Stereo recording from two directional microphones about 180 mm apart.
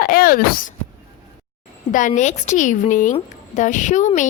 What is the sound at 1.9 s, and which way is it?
A woman's voice, 45° left (ahead or behind).